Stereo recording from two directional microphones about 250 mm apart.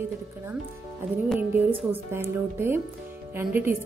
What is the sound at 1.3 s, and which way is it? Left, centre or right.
A woman's voice, centre.